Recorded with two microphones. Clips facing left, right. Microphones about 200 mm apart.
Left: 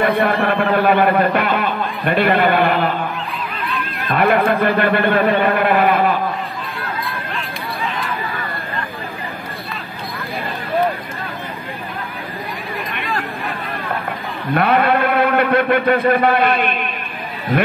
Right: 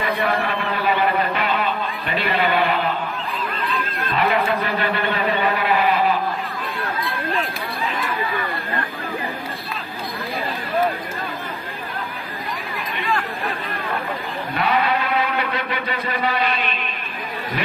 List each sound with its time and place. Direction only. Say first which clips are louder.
0.0 s music: left 6 dB; 55° left (ahead or behind)
4.1 s a sound: left 5 dB; 60° left (ahead or behind)
14.5 s a man's voice: left 6 dB; 55° left (ahead or behind)